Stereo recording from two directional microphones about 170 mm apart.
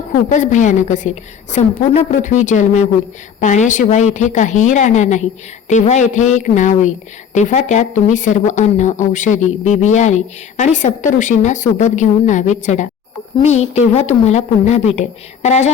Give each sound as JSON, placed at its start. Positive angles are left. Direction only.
{"t": 0.3, "sound": "a woman's voice", "side_deg": 45}